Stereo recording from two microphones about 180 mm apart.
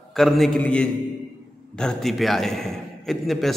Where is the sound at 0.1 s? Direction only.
Centre (ahead or behind).